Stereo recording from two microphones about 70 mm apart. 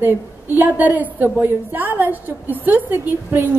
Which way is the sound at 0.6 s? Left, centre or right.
Right.